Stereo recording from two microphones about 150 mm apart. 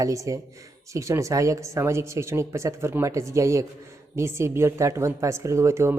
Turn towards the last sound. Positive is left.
turn(degrees=-20)  # may be behind; listen again after turning